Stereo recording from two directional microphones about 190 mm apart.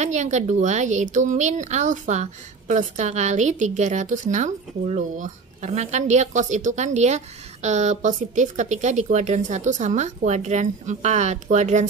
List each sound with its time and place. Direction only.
0.0 s a woman's voice: 40° right (ahead or behind)